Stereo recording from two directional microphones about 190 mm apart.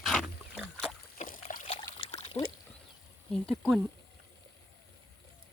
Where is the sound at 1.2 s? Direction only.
40° left (ahead or behind).